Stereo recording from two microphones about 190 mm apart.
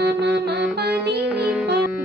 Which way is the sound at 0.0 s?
60° right (ahead or behind).